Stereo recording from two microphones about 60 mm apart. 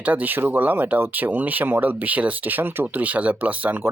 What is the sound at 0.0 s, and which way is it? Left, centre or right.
Speech, right.